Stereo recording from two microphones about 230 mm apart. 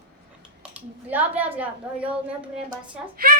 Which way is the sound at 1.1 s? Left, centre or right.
Centre.